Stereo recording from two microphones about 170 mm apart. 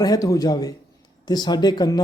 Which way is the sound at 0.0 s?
20° left (ahead or behind).